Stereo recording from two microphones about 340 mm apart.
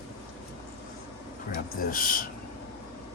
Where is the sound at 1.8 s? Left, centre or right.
Left.